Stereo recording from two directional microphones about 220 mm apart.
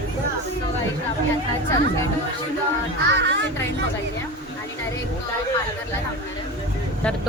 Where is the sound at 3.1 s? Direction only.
55° right (ahead or behind).